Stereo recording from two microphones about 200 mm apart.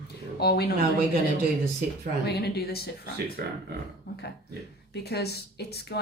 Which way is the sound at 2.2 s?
55° left (ahead or behind).